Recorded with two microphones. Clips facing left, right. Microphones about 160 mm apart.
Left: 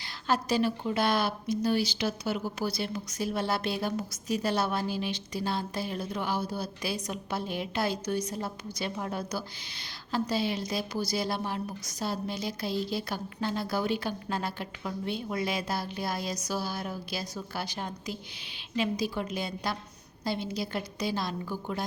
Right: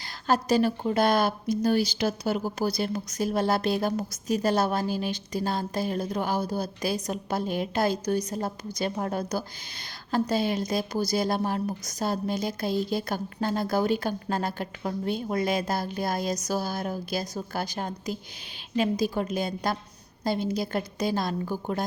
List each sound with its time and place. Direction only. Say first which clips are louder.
0.0 s speech: right 4 dB; 45° right (ahead or behind)